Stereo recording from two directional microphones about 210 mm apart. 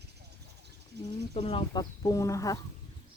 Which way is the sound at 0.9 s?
55° right (ahead or behind).